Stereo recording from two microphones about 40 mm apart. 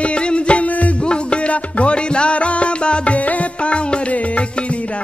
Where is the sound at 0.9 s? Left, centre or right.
Left.